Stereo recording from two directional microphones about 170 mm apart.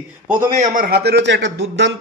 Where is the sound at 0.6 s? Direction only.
60° right (ahead or behind); by 1.9 s 90° right.